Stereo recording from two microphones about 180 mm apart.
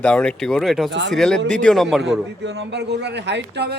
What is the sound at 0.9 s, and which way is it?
Speech, 90° right.